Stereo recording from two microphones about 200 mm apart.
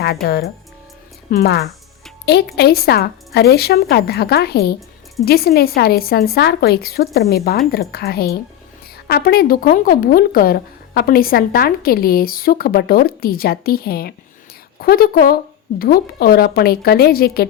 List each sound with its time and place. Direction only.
0.0 s a woman's voice: 50° left (ahead or behind)